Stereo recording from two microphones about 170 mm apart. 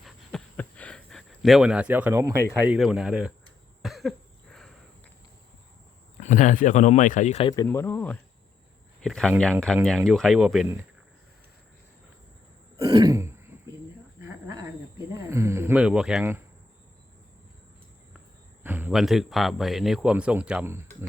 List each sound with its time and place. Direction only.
0.0 s a sound: centre (ahead or behind)
3.8 s cough: centre (ahead or behind)
6.1 s speech: 45° left (ahead or behind)
7.5 s a man's voice: 20° left (ahead or behind); by 10.7 s 5° right (ahead or behind)
12.8 s throat clearing: 25° right (ahead or behind)
14.2 s a sound: 15° right (ahead or behind)
18.6 s a man's voice: 10° right (ahead or behind)